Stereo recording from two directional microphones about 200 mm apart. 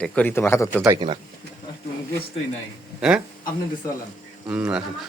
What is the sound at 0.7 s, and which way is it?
Speech, 15° right (ahead or behind).